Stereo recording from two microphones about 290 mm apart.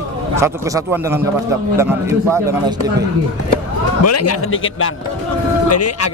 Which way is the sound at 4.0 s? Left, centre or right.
Left.